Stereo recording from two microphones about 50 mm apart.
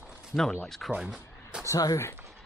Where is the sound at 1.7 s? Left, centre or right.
Left.